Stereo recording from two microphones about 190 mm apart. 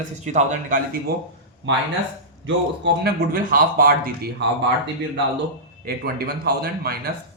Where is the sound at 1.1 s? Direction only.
55° right (ahead or behind).